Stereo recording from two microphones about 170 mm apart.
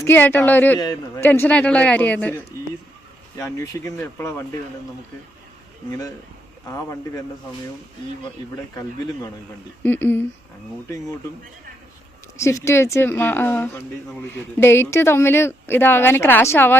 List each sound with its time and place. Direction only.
0.0 s a woman's voice: 10° left (ahead or behind)
6.7 s a woman's voice: 15° left (ahead or behind)
8.7 s a woman's voice: 15° left (ahead or behind)
12.4 s a woman's voice: 15° left (ahead or behind)